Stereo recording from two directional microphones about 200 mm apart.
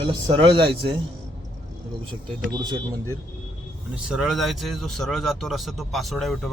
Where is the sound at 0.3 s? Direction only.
25° right (ahead or behind).